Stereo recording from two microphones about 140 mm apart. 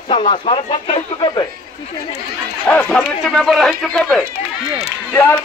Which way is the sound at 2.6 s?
10° left (ahead or behind).